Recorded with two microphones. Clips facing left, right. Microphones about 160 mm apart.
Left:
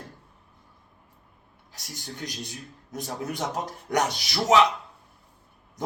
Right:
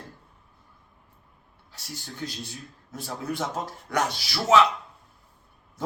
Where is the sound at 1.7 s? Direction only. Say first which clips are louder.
Even; 20° left (ahead or behind).